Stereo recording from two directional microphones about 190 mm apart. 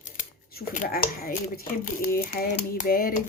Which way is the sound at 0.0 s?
45° left (ahead or behind).